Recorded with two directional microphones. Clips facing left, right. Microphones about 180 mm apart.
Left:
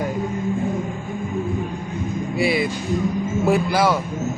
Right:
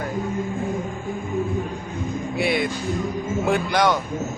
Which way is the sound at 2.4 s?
Centre (ahead or behind).